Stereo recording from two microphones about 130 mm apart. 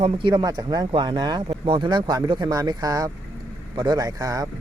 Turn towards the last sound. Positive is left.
turn(degrees=-25)  # may be behind; listen again after turning